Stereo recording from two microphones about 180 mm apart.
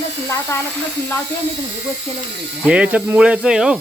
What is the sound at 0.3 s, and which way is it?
Speech, 15° left (ahead or behind).